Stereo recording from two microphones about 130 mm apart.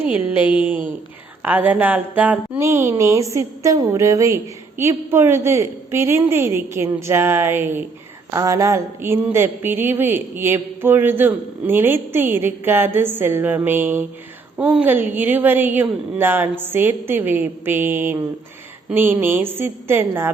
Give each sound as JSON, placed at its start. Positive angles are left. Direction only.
{"t": 0.0, "sound": "a woman's voice", "side_deg": -15}